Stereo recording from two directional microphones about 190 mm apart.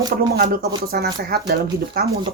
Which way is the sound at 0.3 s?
50° right (ahead or behind).